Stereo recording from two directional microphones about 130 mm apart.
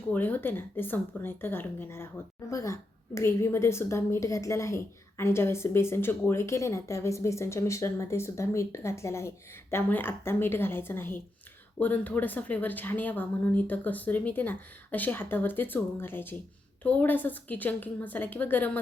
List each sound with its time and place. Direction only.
0.1 s a woman's voice: 15° left (ahead or behind)